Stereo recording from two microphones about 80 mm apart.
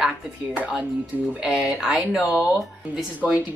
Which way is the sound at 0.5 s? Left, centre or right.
Centre.